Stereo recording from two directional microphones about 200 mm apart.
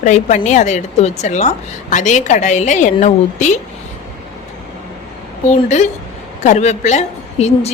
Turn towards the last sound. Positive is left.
turn(degrees=35)  # may be behind; listen again after turning